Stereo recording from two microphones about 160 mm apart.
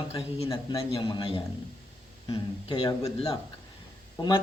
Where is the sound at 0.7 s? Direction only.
30° left (ahead or behind).